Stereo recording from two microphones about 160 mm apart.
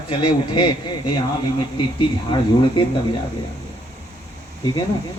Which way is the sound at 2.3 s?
30° left (ahead or behind).